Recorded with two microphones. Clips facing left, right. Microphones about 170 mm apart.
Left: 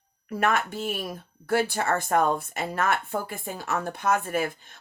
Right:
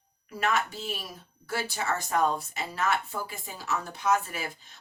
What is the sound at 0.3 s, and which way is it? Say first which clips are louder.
Speech: left 3 dB; 55° left (ahead or behind).